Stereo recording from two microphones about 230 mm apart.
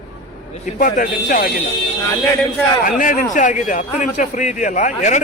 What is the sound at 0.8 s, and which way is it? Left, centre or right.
Speech, left.